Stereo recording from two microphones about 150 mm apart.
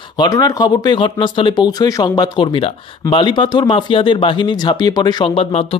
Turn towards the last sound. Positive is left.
turn(degrees=40)  # may be behind; listen again after turning